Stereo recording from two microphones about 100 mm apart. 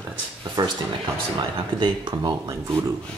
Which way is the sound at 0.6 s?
50° right (ahead or behind).